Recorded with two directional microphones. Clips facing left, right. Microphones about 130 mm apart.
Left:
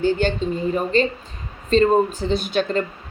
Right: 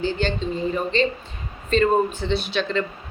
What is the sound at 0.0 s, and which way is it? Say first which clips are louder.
A woman's voice: left 4 dB; 50° left (ahead or behind).